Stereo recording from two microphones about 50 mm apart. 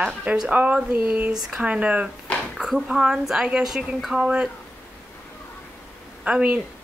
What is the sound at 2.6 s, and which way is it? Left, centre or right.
A woman's voice, centre.